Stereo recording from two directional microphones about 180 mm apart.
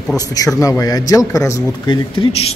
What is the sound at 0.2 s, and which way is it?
A man's voice, 20° left (ahead or behind).